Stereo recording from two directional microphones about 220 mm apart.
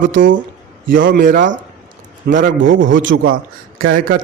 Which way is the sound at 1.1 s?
40° right (ahead or behind).